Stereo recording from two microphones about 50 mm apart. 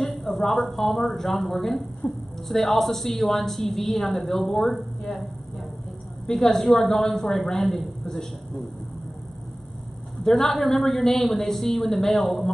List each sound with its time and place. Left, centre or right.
0.0 s a woman's voice: centre
2.0 s a woman's voice: left
2.4 s a woman's voice: centre
10.2 s a woman's voice: centre